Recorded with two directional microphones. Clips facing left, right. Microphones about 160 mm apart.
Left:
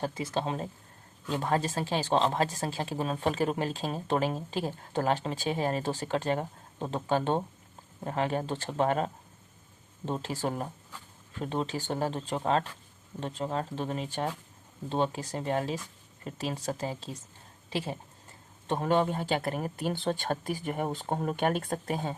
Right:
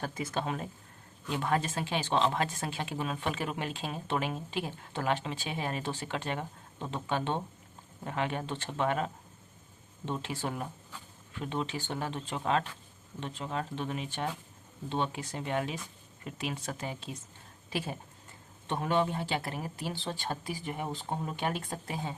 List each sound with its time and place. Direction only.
0.0 s speech: 30° left (ahead or behind)
10.1 s speech: 40° left (ahead or behind)
18.7 s speech: 40° left (ahead or behind)